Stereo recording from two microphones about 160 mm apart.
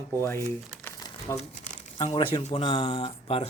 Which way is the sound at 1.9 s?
35° left (ahead or behind).